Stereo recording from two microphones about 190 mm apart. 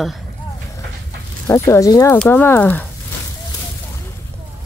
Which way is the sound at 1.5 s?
15° left (ahead or behind).